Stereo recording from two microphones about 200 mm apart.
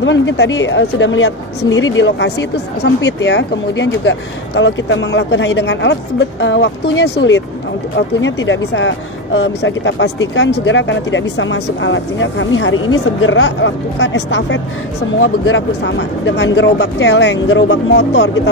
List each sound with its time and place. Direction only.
0.0 s a woman's voice: 65° left (ahead or behind)